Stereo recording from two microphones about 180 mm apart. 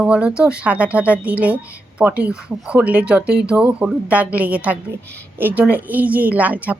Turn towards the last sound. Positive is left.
turn(degrees=-10)  # may be behind; listen again after turning